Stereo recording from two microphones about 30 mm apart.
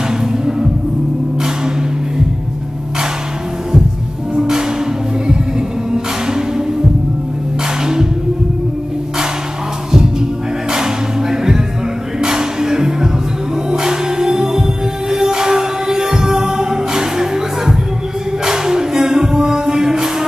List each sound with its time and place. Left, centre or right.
4.4 s music: right
5.9 s music: right
7.8 s music: centre
10.7 s music: centre